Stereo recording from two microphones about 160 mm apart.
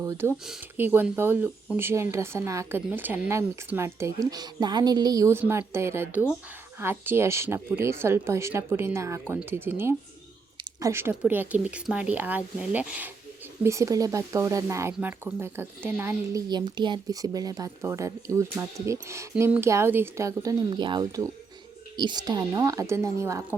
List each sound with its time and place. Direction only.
0.0 s speech: 15° right (ahead or behind)
16.5 s speech: 25° right (ahead or behind)